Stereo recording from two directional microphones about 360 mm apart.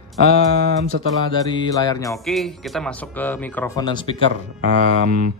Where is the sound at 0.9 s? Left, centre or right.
Right.